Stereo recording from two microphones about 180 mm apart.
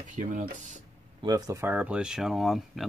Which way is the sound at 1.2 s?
20° right (ahead or behind).